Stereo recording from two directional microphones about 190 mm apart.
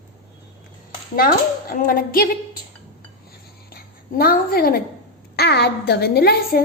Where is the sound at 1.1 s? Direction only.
50° left (ahead or behind).